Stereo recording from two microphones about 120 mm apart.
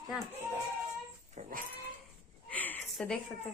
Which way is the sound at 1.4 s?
70° right (ahead or behind).